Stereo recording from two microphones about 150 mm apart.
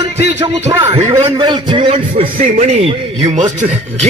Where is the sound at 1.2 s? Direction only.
30° right (ahead or behind).